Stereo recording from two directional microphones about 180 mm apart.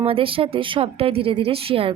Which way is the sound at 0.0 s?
30° right (ahead or behind).